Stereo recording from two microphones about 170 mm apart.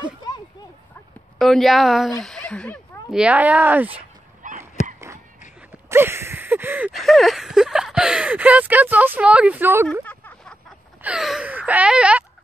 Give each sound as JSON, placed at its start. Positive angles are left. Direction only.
{"t": 1.4, "sound": "speech", "side_deg": 0}
{"t": 3.2, "sound": "speech", "side_deg": -10}
{"t": 4.4, "sound": "honk", "side_deg": -50}
{"t": 5.6, "sound": "a sound", "side_deg": -15}
{"t": 6.9, "sound": "speech", "side_deg": 0}
{"t": 10.0, "sound": "a sound", "side_deg": 5}
{"t": 11.0, "sound": "speech", "side_deg": -5}